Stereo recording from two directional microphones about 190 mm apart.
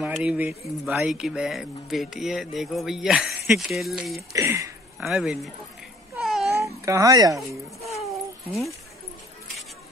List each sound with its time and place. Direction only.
0.0 s speech: 5° right (ahead or behind)
4.3 s speech: 15° right (ahead or behind)
5.0 s speech: centre (ahead or behind)
6.1 s a sound: centre (ahead or behind)
6.8 s speech: 15° right (ahead or behind)
7.8 s a sound: centre (ahead or behind)